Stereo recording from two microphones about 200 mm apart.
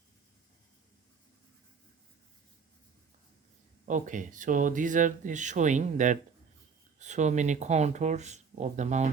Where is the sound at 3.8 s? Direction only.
40° right (ahead or behind).